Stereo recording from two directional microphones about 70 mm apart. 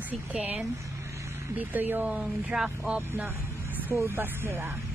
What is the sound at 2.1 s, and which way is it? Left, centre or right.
Speech, centre.